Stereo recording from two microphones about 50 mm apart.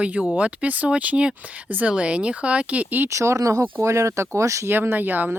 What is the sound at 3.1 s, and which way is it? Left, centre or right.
Speech, right.